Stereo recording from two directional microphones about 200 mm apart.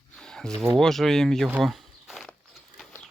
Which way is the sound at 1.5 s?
Centre (ahead or behind).